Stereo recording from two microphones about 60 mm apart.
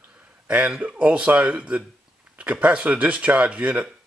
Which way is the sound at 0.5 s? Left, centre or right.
Centre.